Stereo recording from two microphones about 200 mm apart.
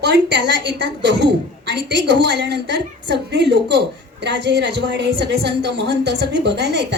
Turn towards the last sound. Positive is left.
turn(degrees=-60)  # may be behind; listen again after turning